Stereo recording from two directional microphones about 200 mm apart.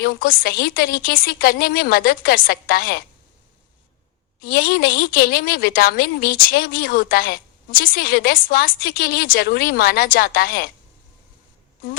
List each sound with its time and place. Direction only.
0.0 s a woman's voice: 50° left (ahead or behind)
4.4 s a woman's voice: 50° left (ahead or behind)